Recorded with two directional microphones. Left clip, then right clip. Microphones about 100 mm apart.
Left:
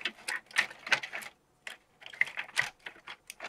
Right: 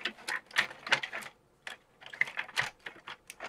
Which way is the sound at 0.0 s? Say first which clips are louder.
Even; 20° left (ahead or behind).